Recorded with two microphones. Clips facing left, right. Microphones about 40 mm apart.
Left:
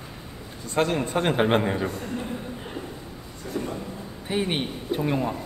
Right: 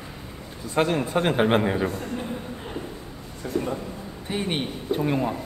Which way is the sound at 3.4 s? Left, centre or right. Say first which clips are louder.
Right 4 dB; right.